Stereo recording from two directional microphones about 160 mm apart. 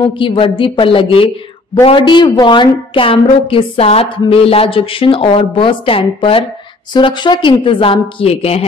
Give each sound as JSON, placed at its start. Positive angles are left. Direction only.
{"t": 0.0, "sound": "a woman's voice", "side_deg": 30}